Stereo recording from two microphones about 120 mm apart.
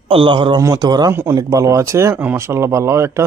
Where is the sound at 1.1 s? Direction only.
20° right (ahead or behind).